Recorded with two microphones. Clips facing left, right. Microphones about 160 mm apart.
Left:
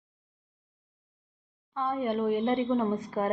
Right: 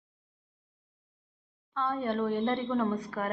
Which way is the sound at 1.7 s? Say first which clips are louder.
Left 2 dB; 15° left (ahead or behind).